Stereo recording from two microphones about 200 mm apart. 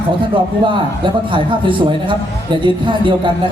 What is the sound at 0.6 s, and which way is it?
A man's voice, 25° right (ahead or behind).